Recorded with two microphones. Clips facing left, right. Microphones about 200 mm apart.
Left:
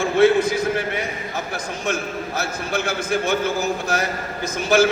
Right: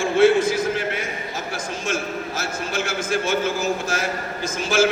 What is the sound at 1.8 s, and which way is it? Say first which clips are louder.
A man's voice: left 1 dB; 60° left (ahead or behind).